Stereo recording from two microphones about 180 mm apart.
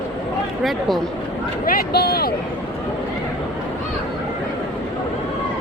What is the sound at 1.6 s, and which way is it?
Speech, 55° left (ahead or behind).